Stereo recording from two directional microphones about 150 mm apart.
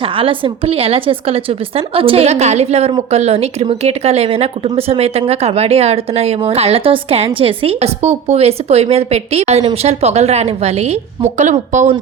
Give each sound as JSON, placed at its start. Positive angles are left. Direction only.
{"t": 0.2, "sound": "a woman's voice", "side_deg": -35}